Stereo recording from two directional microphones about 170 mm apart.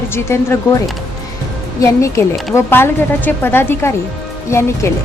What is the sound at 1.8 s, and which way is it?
A woman's voice, 20° left (ahead or behind).